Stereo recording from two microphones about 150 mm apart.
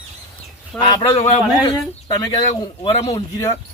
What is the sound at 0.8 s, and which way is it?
Speech, 25° left (ahead or behind).